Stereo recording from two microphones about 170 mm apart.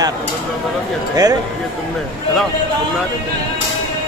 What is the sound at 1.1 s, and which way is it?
Speech, 20° right (ahead or behind).